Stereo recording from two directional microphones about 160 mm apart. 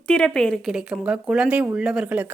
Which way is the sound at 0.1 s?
5° left (ahead or behind).